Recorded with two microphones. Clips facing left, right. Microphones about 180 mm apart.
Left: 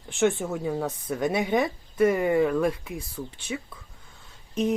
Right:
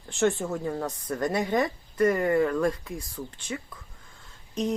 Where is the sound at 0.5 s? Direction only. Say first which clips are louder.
Left 2 dB; 5° left (ahead or behind).